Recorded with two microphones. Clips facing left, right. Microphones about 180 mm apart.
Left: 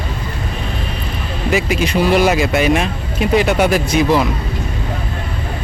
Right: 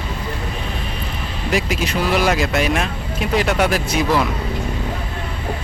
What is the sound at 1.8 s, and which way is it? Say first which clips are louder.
Speech: left 6 dB; centre (ahead or behind).